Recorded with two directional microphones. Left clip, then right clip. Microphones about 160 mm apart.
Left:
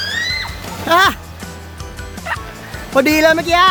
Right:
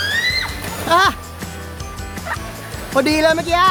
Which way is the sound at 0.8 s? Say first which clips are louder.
Left 2 dB; 35° left (ahead or behind).